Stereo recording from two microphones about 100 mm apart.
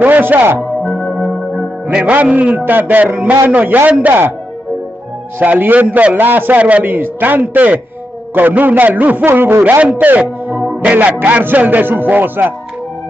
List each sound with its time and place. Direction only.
0.0 s speech: 20° right (ahead or behind)
0.6 s music: centre (ahead or behind)
1.9 s a man's voice: 10° right (ahead or behind)
5.4 s a man's voice: 15° right (ahead or behind)